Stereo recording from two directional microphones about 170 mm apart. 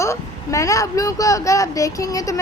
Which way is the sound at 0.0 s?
20° left (ahead or behind).